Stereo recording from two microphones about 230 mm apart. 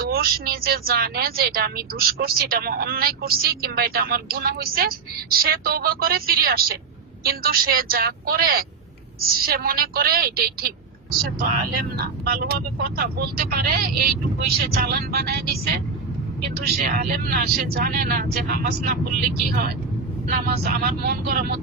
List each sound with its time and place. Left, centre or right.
0.0 s a woman's voice: right